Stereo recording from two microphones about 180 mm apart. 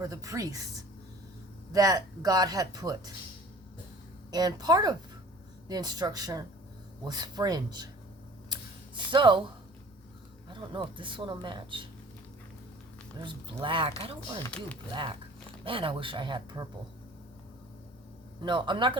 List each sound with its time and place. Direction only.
0.0 s speech: 20° right (ahead or behind)
1.7 s speech: 20° right (ahead or behind)
4.3 s speech: 20° right (ahead or behind)
9.0 s speech: 25° right (ahead or behind)
10.5 s speech: 30° right (ahead or behind)
13.2 s speech: 25° right (ahead or behind)
14.5 s speech: 5° left (ahead or behind)
15.6 s speech: 30° right (ahead or behind)
18.4 s speech: 25° right (ahead or behind)